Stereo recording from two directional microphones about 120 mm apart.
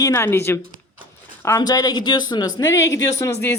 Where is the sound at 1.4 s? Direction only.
30° left (ahead or behind).